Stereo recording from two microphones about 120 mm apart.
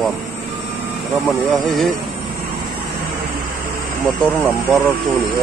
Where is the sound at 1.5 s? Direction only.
Centre (ahead or behind).